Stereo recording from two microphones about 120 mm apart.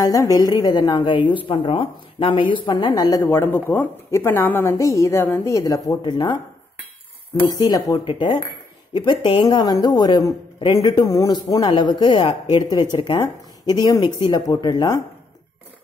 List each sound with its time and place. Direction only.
0.0 s a woman's voice: 30° left (ahead or behind)
3.3 s a woman's voice: 20° left (ahead or behind)
5.5 s a woman's voice: 30° left (ahead or behind)
6.0 s a woman's voice: 40° left (ahead or behind)
7.4 s a woman's voice: 30° left (ahead or behind)
8.1 s a woman's voice: 45° left (ahead or behind)